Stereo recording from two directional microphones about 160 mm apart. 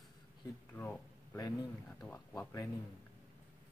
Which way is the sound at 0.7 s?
15° left (ahead or behind).